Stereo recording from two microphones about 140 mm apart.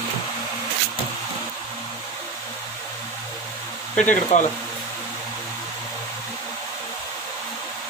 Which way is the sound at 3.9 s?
60° left (ahead or behind).